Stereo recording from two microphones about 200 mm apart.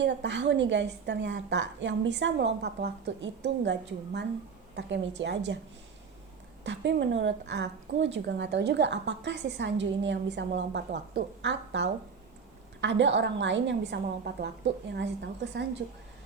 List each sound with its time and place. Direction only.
0.0 s a woman's voice: 60° right (ahead or behind)
6.7 s a woman's voice: 65° right (ahead or behind)